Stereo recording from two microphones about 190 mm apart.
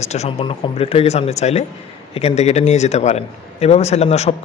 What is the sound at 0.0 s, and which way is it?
A man's voice, 35° left (ahead or behind).